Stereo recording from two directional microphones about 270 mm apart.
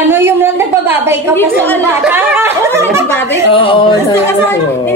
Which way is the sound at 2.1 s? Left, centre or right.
Centre.